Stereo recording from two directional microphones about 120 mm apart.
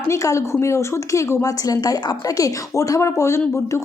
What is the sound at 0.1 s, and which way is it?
Speech, 25° left (ahead or behind).